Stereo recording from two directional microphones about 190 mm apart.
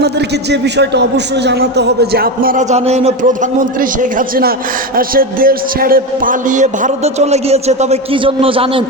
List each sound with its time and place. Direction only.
0.5 s a man's voice: 65° right (ahead or behind); by 8.8 s 30° right (ahead or behind)